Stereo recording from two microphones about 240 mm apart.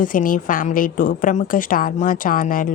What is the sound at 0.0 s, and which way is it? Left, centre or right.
A woman's voice, left.